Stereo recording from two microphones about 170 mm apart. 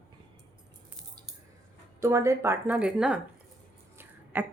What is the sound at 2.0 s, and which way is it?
Speech, 15° right (ahead or behind).